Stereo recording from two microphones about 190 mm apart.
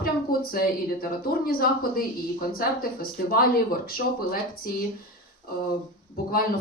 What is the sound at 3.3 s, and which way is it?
Speech, 50° left (ahead or behind).